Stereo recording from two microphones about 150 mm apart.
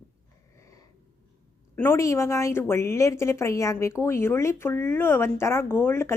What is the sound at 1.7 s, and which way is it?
A woman's voice, 15° left (ahead or behind).